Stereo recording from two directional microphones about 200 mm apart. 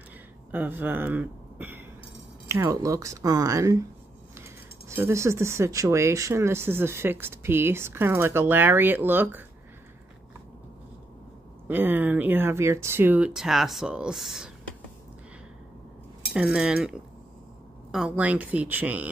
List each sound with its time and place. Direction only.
0.5 s speech: 10° right (ahead or behind)
11.6 s speech: 10° right (ahead or behind)
16.3 s speech: 5° right (ahead or behind)
17.9 s speech: 5° right (ahead or behind)